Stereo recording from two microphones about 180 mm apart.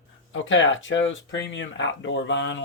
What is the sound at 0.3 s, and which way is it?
Speech, 90° left.